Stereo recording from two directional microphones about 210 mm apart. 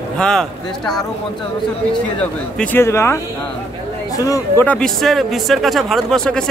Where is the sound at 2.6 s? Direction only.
10° left (ahead or behind).